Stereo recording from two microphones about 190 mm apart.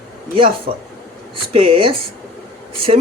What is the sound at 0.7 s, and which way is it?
Speech, 40° right (ahead or behind).